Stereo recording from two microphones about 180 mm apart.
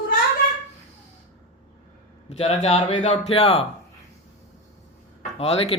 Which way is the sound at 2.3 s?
35° left (ahead or behind).